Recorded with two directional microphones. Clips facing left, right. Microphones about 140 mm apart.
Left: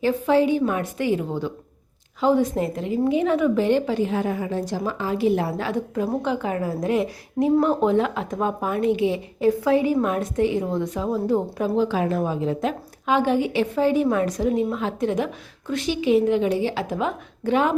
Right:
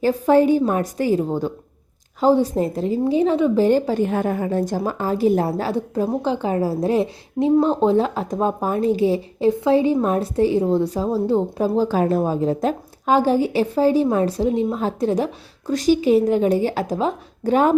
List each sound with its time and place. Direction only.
0.0 s a woman's voice: 40° right (ahead or behind)
9.5 s a woman's voice: 25° right (ahead or behind); by 17.7 s 40° right (ahead or behind)